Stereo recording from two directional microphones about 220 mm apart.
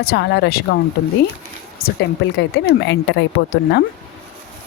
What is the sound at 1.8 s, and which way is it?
Speech, 45° left (ahead or behind).